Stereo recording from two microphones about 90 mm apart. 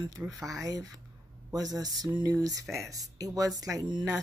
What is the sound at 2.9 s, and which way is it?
Speech, 40° right (ahead or behind).